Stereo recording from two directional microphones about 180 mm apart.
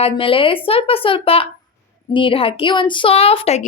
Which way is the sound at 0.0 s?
30° left (ahead or behind).